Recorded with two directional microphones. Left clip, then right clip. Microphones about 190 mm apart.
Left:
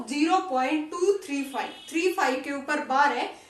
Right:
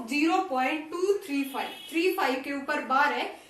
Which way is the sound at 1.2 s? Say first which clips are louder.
Left 1 dB; 30° left (ahead or behind).